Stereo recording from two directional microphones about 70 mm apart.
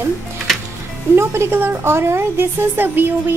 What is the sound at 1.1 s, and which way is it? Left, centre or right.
A woman's voice, right.